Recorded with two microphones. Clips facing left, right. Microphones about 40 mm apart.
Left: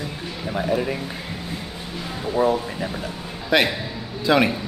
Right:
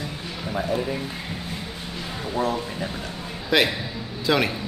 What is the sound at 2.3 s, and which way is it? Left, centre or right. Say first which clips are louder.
A man's voice: left 5 dB; centre.